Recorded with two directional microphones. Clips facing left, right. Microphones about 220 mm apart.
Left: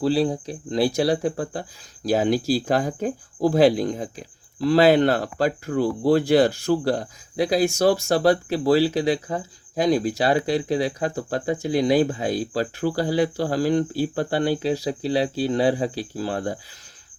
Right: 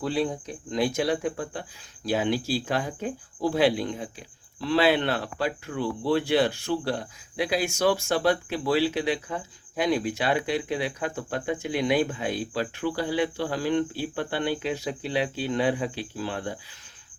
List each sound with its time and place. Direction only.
0.0 s speech: 35° left (ahead or behind)